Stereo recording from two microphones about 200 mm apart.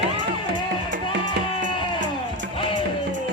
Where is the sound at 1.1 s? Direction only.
65° right (ahead or behind).